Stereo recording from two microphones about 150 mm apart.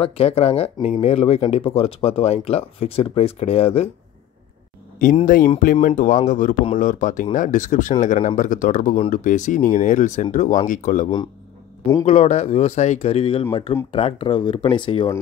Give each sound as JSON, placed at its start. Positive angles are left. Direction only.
{"t": 0.0, "sound": "speech", "side_deg": 40}
{"t": 5.2, "sound": "speech", "side_deg": 65}
{"t": 12.1, "sound": "speech", "side_deg": 45}